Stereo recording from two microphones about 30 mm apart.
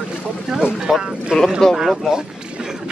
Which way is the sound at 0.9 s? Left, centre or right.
Right.